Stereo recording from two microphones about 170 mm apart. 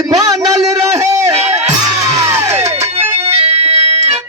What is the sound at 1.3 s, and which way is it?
Music, 40° right (ahead or behind).